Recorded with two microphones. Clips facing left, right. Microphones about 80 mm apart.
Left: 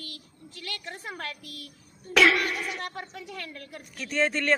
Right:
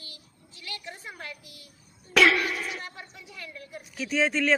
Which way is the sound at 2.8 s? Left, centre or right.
Left.